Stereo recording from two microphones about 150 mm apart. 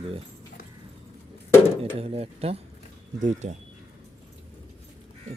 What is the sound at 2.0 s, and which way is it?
Speech, 40° right (ahead or behind).